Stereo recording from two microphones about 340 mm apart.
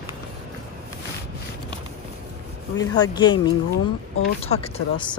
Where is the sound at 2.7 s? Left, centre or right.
Centre.